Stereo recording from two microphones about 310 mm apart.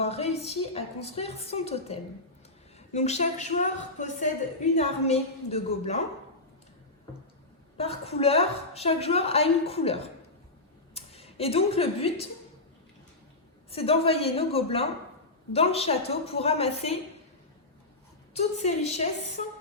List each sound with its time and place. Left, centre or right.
0.0 s a woman's voice: centre
7.8 s a woman's voice: centre
13.7 s a woman's voice: centre
18.3 s a woman's voice: left